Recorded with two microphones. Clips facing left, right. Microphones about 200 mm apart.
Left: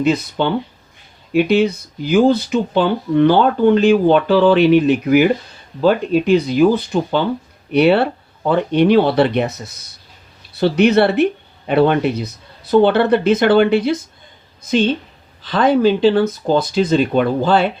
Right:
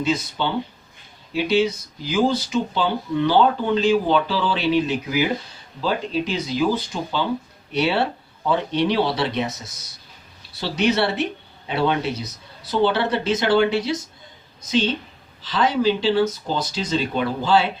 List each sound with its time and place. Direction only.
0.0 s a woman's voice: 60° left (ahead or behind)